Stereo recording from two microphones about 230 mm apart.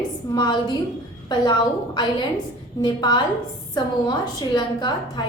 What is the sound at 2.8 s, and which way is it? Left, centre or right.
A woman's voice, centre.